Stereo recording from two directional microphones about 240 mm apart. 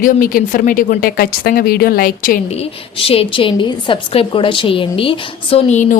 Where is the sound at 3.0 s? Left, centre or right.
Left.